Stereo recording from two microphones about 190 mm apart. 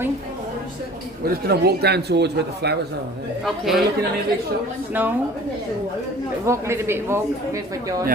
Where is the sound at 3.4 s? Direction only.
Centre (ahead or behind).